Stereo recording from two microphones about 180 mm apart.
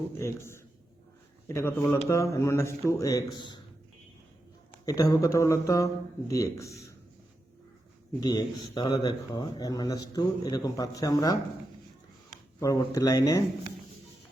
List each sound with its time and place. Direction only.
0.1 s a man's voice: 15° left (ahead or behind)
4.9 s a man's voice: 20° left (ahead or behind)
8.2 s speech: 20° left (ahead or behind)
12.5 s speech: 20° left (ahead or behind)